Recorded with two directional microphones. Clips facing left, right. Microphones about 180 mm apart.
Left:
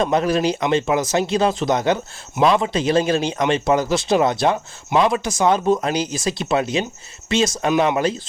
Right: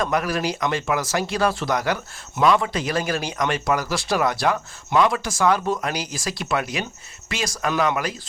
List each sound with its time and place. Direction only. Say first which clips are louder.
0.0 s speech: left 5 dB; 25° left (ahead or behind)